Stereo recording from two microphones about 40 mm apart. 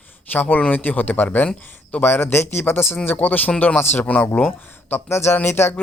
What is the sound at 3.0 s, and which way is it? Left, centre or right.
Speech, left.